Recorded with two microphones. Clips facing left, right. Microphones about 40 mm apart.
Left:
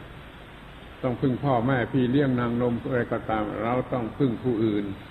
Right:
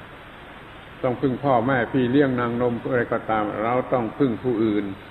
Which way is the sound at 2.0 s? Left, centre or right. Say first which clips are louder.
Right 4 dB; centre.